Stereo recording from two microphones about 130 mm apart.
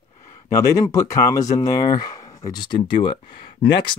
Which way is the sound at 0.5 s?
25° left (ahead or behind).